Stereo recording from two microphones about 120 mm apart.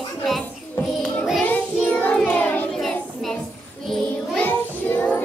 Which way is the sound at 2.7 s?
Centre (ahead or behind).